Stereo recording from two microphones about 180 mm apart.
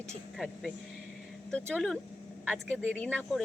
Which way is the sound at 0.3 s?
Centre (ahead or behind).